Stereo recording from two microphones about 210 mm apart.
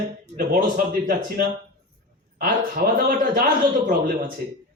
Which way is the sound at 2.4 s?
45° right (ahead or behind).